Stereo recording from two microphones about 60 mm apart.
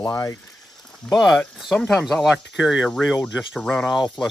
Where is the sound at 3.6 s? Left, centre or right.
Centre.